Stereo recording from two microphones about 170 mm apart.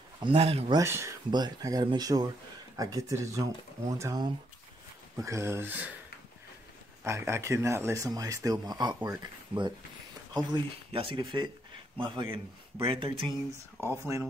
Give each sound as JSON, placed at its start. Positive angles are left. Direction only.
{"t": 0.2, "sound": "speech", "side_deg": -30}
{"t": 0.7, "sound": "speech", "side_deg": -15}
{"t": 7.1, "sound": "speech", "side_deg": -15}
{"t": 13.8, "sound": "speech", "side_deg": -15}